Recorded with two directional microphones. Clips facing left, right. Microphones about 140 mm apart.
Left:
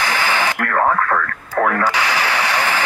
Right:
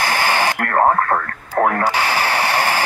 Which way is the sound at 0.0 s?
40° right (ahead or behind).